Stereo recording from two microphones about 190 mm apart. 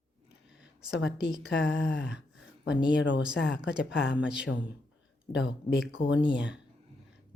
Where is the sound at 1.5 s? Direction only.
75° left (ahead or behind).